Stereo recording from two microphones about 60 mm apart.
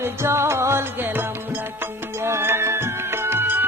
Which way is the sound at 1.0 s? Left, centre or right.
Right.